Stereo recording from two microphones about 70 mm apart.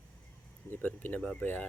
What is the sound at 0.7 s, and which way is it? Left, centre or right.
Speech, left.